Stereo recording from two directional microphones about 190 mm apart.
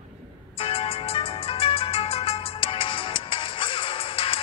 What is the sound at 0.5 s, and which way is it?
Music, 30° left (ahead or behind).